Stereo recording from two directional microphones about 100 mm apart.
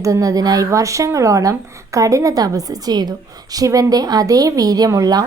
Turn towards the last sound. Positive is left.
turn(degrees=-40)  # may be behind; listen again after turning